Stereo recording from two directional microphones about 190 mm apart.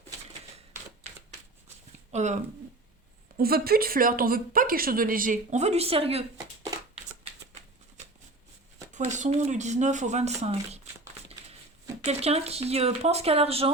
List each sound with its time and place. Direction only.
2.1 s speech: 40° right (ahead or behind)
3.3 s speech: 50° right (ahead or behind); by 6.2 s 30° right (ahead or behind)
8.9 s speech: 40° right (ahead or behind)
12.0 s speech: 35° right (ahead or behind)